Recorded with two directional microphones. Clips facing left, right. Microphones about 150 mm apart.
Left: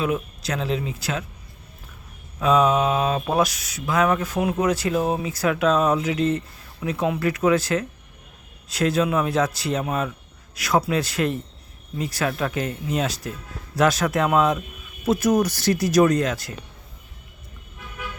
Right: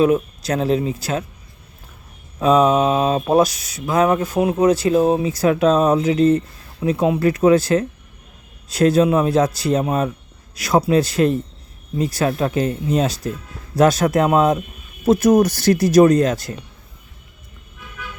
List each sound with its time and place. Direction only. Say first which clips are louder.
0.0 s mantra: right 9 dB; 40° right (ahead or behind)
2.4 s mantra: right 4 dB; 35° right (ahead or behind)